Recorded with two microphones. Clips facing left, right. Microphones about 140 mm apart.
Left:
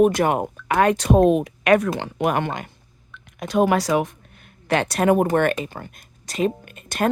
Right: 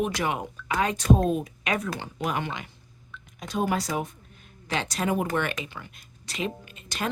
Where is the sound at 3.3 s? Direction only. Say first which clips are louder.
Left 9 dB; 70° left (ahead or behind); by 6.5 s 45° left (ahead or behind).